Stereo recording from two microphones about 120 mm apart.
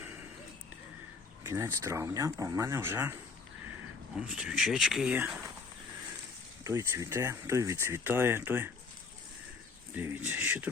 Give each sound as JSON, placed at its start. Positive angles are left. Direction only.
{"t": 1.5, "sound": "speech", "side_deg": -25}
{"t": 4.3, "sound": "speech", "side_deg": -5}
{"t": 6.7, "sound": "speech", "side_deg": -25}
{"t": 9.9, "sound": "speech", "side_deg": -15}